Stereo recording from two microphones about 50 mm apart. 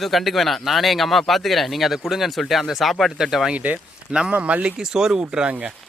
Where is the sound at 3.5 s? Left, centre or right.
Right.